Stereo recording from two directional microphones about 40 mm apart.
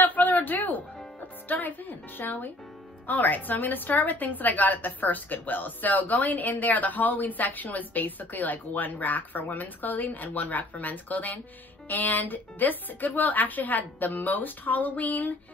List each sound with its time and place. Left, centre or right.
0.0 s music: left
3.1 s a woman's voice: left